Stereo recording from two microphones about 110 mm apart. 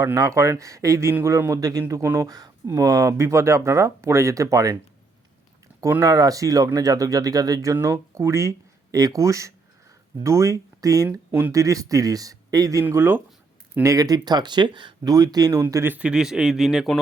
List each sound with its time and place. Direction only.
0.0 s speech: 30° right (ahead or behind)
6.0 s speech: 35° right (ahead or behind)
11.3 s speech: 15° right (ahead or behind)
11.5 s speech: 30° right (ahead or behind)
12.8 s speech: 20° right (ahead or behind)
13.8 s speech: 30° right (ahead or behind)
15.6 s a man's voice: 20° right (ahead or behind); by 16.9 s 5° right (ahead or behind)